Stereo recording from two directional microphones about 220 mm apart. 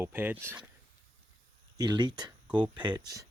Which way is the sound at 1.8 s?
20° right (ahead or behind).